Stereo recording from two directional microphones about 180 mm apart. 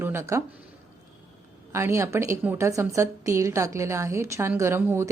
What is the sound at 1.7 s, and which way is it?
A woman's voice, 15° right (ahead or behind).